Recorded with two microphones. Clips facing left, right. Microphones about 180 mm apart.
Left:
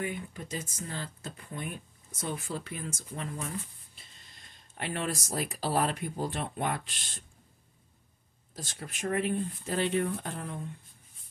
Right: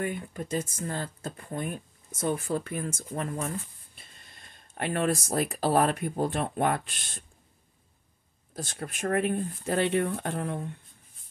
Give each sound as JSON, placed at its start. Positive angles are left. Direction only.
{"t": 0.0, "sound": "speech", "side_deg": -50}
{"t": 8.5, "sound": "speech", "side_deg": -55}